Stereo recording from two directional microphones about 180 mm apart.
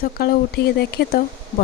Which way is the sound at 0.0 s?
55° left (ahead or behind).